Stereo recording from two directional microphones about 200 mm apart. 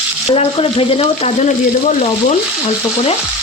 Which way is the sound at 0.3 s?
30° left (ahead or behind).